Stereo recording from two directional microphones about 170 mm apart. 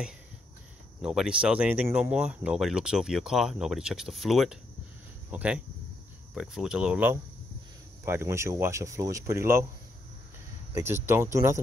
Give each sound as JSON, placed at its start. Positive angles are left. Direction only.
{"t": 1.0, "sound": "speech", "side_deg": -5}
{"t": 10.7, "sound": "speech", "side_deg": -15}